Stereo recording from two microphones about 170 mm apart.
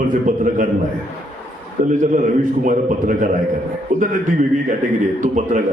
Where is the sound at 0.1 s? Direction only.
50° right (ahead or behind).